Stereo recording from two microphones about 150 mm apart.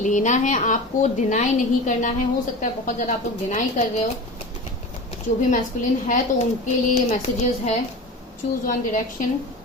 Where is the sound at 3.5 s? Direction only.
55° left (ahead or behind).